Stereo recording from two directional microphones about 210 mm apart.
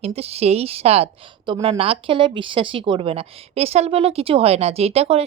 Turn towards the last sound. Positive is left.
turn(degrees=-30)  # may be behind; listen again after turning